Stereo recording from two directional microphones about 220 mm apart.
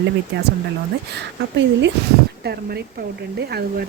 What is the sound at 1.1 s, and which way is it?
Speech, 55° right (ahead or behind).